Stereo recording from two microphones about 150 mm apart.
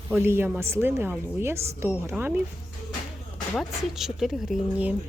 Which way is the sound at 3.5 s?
Centre (ahead or behind).